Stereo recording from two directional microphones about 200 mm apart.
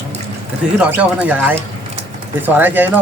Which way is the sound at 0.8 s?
10° right (ahead or behind).